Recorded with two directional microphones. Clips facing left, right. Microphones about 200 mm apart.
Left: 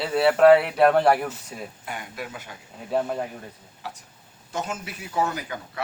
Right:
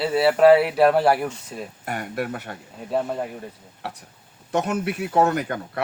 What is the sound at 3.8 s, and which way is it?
Speech, 60° right (ahead or behind).